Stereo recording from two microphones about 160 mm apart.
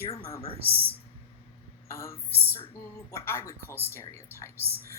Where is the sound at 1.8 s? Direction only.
15° left (ahead or behind).